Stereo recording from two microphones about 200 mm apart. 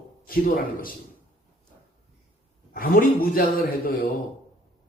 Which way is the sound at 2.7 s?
45° left (ahead or behind).